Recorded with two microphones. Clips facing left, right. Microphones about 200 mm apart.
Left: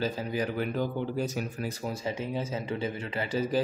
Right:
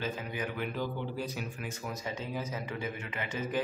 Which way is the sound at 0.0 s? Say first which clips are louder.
Left 6 dB; 35° left (ahead or behind).